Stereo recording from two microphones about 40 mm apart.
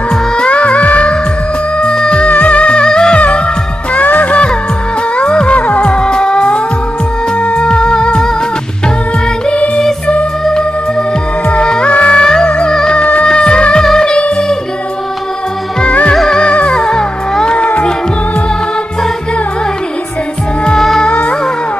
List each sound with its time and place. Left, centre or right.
0.1 s music: left
1.8 s music: left
2.2 s music: left; by 3.2 s centre
3.2 s music: left
5.1 s music: left
5.6 s music: left
5.9 s music: left
7.6 s music: left
10.4 s music: centre
13.0 s music: left
13.3 s music: left
15.8 s music: left; by 17.6 s centre
17.6 s music: left
21.1 s music: left